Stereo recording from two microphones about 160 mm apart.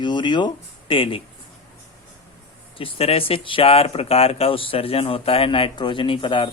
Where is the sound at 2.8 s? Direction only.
35° left (ahead or behind).